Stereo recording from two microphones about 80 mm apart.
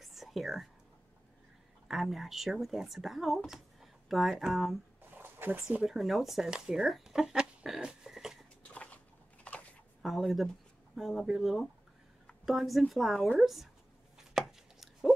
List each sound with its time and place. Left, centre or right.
0.0 s whispering: centre
1.9 s speech: centre
5.1 s a sound: right
5.9 s speech: centre
8.6 s a sound: centre
10.0 s speech: centre
14.1 s chopping: centre